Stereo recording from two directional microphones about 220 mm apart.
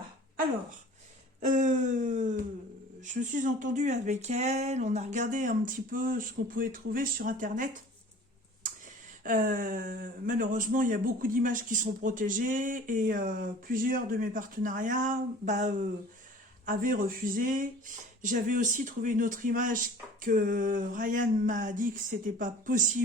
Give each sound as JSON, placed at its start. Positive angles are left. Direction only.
{"t": 1.4, "sound": "speech", "side_deg": -35}
{"t": 9.2, "sound": "speech", "side_deg": -35}